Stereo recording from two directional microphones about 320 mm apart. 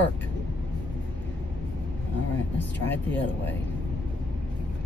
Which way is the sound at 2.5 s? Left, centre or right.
Centre.